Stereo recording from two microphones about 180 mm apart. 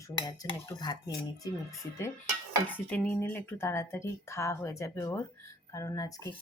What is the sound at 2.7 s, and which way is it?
Speech, 10° left (ahead or behind).